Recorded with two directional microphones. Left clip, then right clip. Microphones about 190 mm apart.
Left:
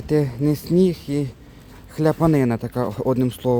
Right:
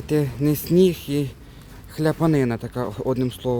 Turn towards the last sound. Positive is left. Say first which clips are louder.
# left 3 dB
turn(degrees=30)  # may be behind; listen again after turning